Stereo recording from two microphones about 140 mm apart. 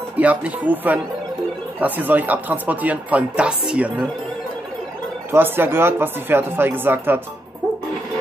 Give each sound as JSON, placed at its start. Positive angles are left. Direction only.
{"t": 0.2, "sound": "speech", "side_deg": -10}
{"t": 5.3, "sound": "speech", "side_deg": -15}